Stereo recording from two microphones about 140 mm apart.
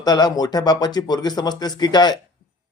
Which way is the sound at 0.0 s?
30° left (ahead or behind).